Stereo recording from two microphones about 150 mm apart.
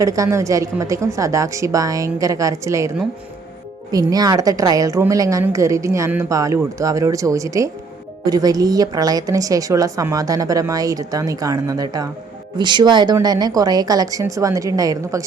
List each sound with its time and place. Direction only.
0.0 s speech: 20° right (ahead or behind)
3.9 s speech: 25° right (ahead or behind)